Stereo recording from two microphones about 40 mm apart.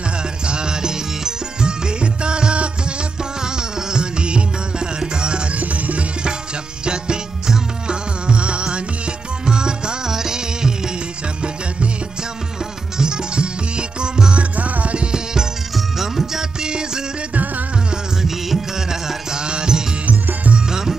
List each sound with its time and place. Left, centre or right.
0.5 s music: right
5.6 s music: right
6.8 s music: right
12.9 s music: centre
14.5 s music: right
15.0 s music: centre
15.7 s music: centre
16.6 s music: centre
17.3 s music: right
18.2 s music: centre
20.1 s music: right
20.5 s music: centre